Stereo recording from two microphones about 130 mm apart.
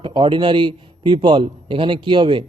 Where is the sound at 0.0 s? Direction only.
40° right (ahead or behind).